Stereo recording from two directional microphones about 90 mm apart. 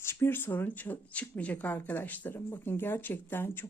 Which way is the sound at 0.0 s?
30° left (ahead or behind).